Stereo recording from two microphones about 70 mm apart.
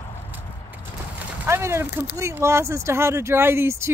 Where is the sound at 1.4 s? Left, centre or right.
Right.